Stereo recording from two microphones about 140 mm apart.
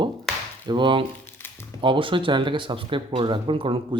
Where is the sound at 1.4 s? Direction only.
15° left (ahead or behind).